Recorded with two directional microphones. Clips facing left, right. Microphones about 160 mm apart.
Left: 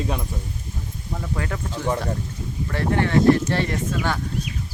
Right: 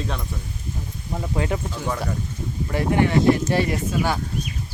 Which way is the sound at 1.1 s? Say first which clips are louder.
Right 4 dB; 20° right (ahead or behind).